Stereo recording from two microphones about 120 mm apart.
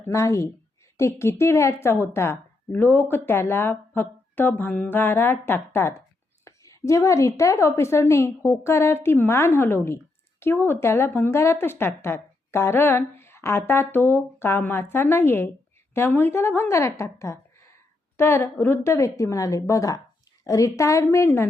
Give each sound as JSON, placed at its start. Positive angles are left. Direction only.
{"t": 0.0, "sound": "a woman's voice", "side_deg": 25}